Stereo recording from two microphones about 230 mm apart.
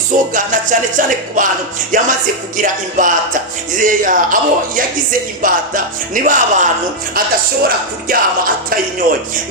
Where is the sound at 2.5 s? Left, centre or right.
Right.